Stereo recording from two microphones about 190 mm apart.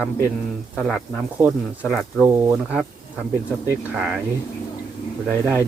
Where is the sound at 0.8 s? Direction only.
Centre (ahead or behind).